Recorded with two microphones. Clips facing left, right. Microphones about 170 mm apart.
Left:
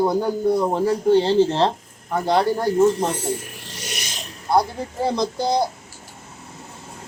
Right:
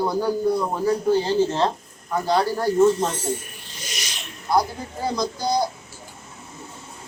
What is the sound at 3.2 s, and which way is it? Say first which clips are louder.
Rub: left 1 dB; 90° left.